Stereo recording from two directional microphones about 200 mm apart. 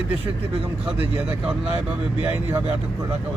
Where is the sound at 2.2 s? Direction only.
10° right (ahead or behind).